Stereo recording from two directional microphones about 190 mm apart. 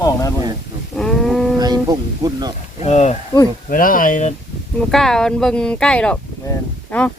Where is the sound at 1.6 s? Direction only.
20° right (ahead or behind).